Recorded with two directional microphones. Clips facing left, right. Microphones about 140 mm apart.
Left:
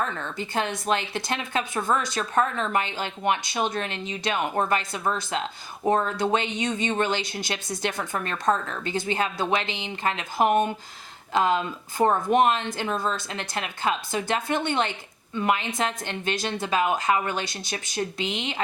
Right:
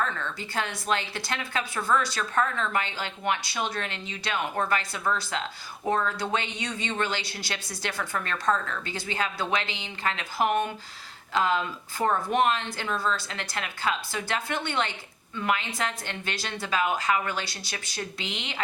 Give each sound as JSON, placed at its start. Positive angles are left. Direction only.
{"t": 0.0, "sound": "a woman's voice", "side_deg": 20}